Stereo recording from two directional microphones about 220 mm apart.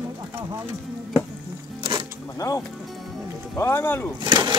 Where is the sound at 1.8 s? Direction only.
20° right (ahead or behind).